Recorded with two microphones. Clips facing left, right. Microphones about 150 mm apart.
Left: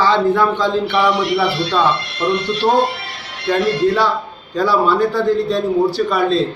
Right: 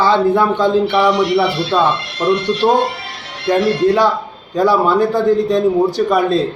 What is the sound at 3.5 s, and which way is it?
A man's voice, 15° right (ahead or behind).